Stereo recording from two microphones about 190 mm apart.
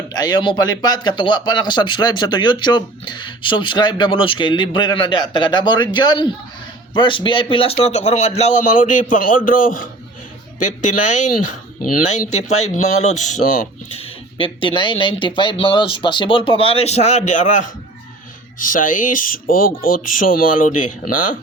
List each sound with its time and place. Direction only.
0.1 s speech: 20° left (ahead or behind); by 14.0 s 40° left (ahead or behind)
14.3 s speech: 25° left (ahead or behind); by 21.3 s 45° left (ahead or behind)